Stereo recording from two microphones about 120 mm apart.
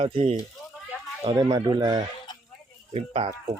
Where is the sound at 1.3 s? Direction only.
30° right (ahead or behind).